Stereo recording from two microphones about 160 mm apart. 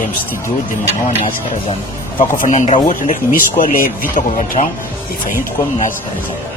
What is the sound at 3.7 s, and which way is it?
Speech, 60° left (ahead or behind).